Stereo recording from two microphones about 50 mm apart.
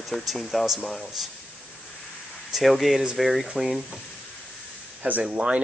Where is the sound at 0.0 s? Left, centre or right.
Centre.